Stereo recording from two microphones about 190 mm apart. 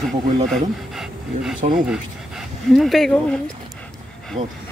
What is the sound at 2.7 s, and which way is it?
Speech, centre (ahead or behind).